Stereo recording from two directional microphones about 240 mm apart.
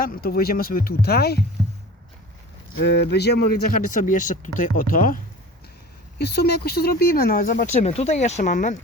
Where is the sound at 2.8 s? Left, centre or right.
Left.